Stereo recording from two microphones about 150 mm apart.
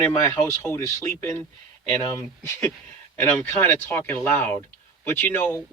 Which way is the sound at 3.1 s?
10° left (ahead or behind).